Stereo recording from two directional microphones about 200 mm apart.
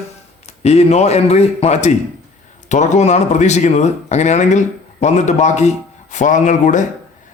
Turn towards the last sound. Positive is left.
turn(degrees=40)  # may be behind; listen again after turning